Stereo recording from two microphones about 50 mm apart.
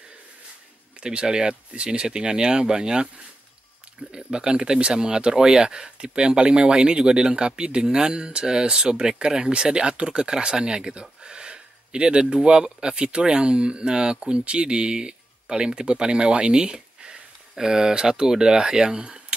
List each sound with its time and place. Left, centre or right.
1.0 s speech: centre